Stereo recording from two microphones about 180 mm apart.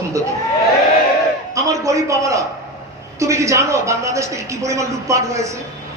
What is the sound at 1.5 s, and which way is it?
A man's voice, 15° right (ahead or behind).